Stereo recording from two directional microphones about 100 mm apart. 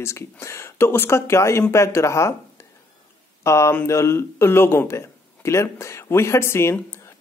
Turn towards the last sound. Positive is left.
turn(degrees=25)  # may be behind; listen again after turning